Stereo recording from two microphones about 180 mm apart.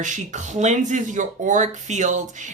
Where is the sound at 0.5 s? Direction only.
40° right (ahead or behind).